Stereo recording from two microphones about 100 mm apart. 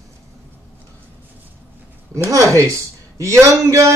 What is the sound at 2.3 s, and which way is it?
A man's voice, 30° right (ahead or behind).